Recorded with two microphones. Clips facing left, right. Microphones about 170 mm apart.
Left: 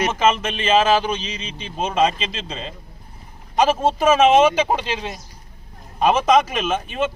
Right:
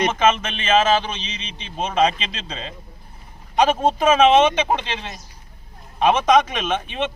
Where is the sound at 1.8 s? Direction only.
5° left (ahead or behind).